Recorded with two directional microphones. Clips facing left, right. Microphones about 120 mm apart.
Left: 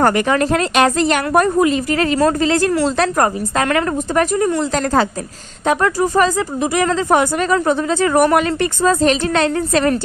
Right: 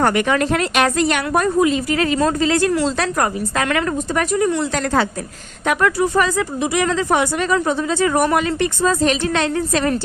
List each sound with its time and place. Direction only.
0.0 s a woman's voice: 35° left (ahead or behind)
1.3 s speech: 50° left (ahead or behind)
2.5 s a woman's voice: 45° left (ahead or behind)